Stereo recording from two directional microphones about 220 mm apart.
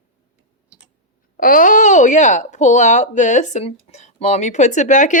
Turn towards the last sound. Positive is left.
turn(degrees=35)  # may be behind; listen again after turning